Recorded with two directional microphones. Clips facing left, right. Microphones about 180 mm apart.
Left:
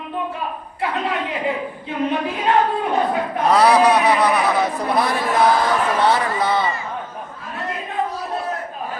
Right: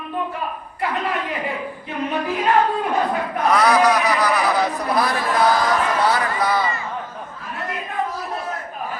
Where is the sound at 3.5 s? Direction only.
30° left (ahead or behind).